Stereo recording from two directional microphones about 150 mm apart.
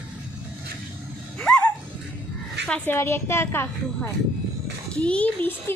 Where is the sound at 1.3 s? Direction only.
5° left (ahead or behind).